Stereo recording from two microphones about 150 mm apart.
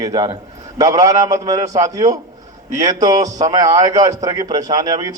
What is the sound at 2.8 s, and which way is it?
A man's voice, 25° right (ahead or behind).